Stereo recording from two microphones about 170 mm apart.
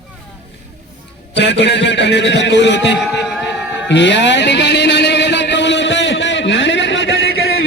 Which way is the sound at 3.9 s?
90° left.